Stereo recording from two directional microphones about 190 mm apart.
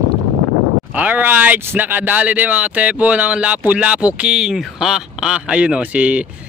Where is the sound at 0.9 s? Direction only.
10° right (ahead or behind).